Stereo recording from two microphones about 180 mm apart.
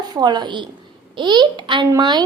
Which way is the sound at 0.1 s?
25° right (ahead or behind).